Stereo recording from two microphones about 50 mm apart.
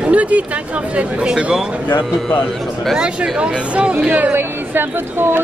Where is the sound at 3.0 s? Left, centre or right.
Right.